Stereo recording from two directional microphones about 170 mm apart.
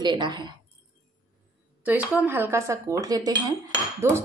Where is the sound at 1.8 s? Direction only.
10° right (ahead or behind).